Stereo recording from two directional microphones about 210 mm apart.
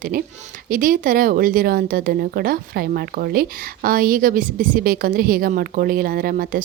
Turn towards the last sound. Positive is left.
turn(degrees=-45)  # may be behind; listen again after turning